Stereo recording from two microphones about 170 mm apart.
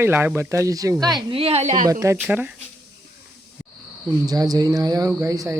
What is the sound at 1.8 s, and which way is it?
Cricket, 20° right (ahead or behind).